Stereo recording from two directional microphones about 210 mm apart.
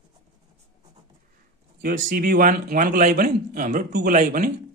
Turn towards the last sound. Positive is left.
turn(degrees=-40)  # may be behind; listen again after turning